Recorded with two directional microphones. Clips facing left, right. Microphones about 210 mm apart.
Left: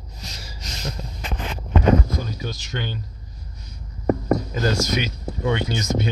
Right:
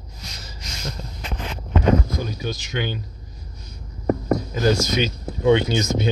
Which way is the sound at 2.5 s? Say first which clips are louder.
Right 3 dB; 15° right (ahead or behind).